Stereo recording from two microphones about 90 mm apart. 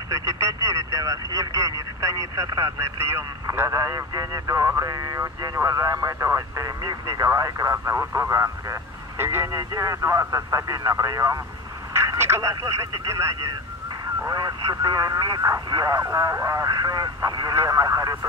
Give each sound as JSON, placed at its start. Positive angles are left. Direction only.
{"t": 0.1, "sound": "speech", "side_deg": -35}
{"t": 7.7, "sound": "speech", "side_deg": -25}
{"t": 9.5, "sound": "speech", "side_deg": -40}
{"t": 14.3, "sound": "speech", "side_deg": -45}